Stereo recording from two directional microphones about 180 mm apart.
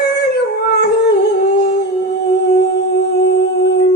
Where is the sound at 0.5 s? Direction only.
65° left (ahead or behind).